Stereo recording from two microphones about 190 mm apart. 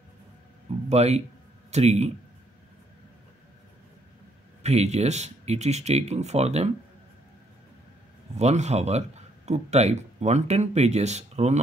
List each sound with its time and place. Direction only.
0.8 s speech: 35° right (ahead or behind)
4.6 s speech: 35° right (ahead or behind)
8.4 s speech: 35° right (ahead or behind)